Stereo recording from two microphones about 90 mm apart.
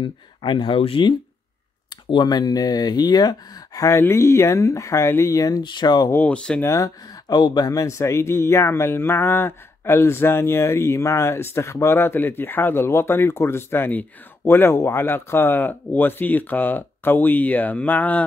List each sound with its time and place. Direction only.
0.0 s speech: 65° left (ahead or behind); by 1.0 s 85° left
2.0 s speech: 55° left (ahead or behind); by 5.6 s 40° left (ahead or behind)
5.6 s speech: 55° left (ahead or behind)
6.1 s speech: 15° left (ahead or behind)
6.6 s speech: 35° left (ahead or behind)
7.2 s speech: 50° left (ahead or behind); by 18.2 s 20° left (ahead or behind)